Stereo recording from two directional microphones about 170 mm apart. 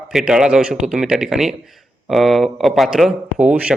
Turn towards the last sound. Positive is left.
turn(degrees=-5)  # may be behind; listen again after turning